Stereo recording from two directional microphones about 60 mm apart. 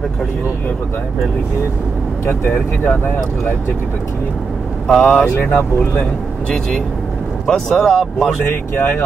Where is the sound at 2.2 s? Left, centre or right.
Left.